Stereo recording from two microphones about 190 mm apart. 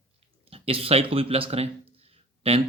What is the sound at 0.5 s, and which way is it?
Speech, 30° right (ahead or behind).